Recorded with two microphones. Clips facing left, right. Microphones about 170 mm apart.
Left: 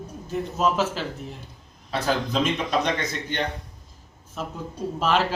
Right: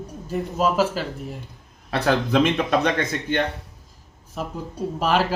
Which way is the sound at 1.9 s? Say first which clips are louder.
Right 5 dB; 60° right (ahead or behind).